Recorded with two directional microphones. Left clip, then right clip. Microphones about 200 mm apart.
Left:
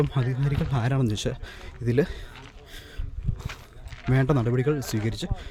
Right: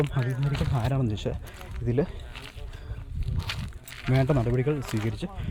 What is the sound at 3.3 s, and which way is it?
Livestock, 50° right (ahead or behind).